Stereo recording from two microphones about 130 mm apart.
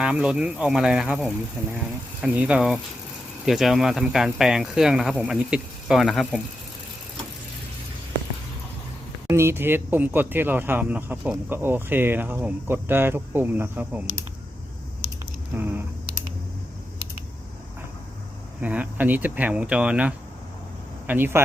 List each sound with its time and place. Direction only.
0.0 s speech: 5° right (ahead or behind)
1.6 s speech: 20° right (ahead or behind); by 6.4 s centre (ahead or behind)
9.3 s speech: 20° right (ahead or behind)
15.5 s speech: 15° right (ahead or behind)
18.6 s speech: 10° right (ahead or behind)